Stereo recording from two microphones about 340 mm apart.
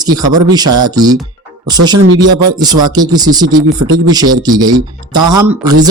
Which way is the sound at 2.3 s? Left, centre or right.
Centre.